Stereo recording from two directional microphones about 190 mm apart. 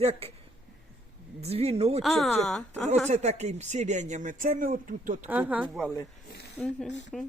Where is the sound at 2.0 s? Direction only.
Centre (ahead or behind).